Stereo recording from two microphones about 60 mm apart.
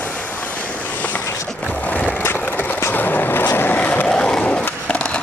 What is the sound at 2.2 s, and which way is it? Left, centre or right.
Skateboard, left.